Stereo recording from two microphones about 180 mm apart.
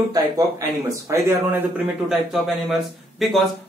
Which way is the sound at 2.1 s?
Centre (ahead or behind).